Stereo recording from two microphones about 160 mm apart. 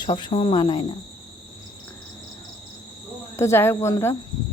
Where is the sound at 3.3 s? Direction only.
15° left (ahead or behind).